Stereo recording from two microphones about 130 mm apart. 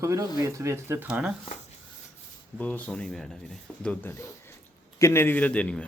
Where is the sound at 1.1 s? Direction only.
5° right (ahead or behind).